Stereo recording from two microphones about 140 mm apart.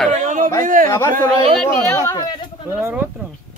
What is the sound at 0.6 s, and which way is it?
Speech, 80° right.